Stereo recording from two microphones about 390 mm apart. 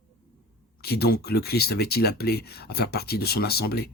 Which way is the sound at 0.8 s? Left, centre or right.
Left.